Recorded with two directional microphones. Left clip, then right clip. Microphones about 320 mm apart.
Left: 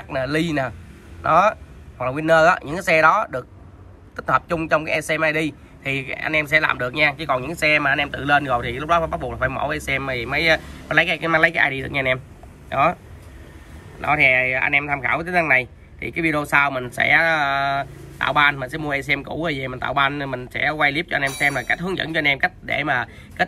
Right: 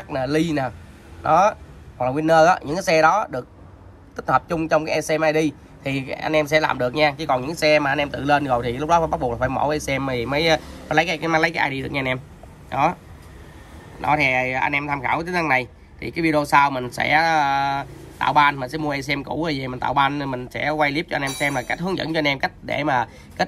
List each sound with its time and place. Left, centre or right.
0.1 s speech: centre
14.9 s speech: centre
15.6 s speech: left
16.5 s speech: centre